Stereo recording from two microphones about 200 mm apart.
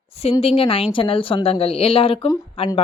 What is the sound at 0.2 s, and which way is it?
Speech, 30° left (ahead or behind).